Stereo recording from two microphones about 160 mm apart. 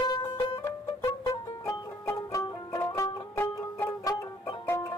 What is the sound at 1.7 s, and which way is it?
Music, 20° left (ahead or behind).